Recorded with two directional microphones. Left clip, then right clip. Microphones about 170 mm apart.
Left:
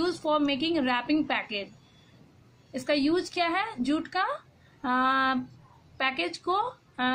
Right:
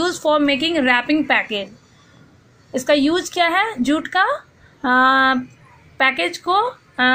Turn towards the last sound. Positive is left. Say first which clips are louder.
# right 11 dB
turn(degrees=-25)  # may be behind; listen again after turning